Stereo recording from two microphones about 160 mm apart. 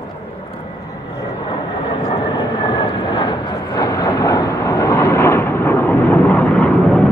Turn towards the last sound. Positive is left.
turn(degrees=5)  # may be behind; listen again after turning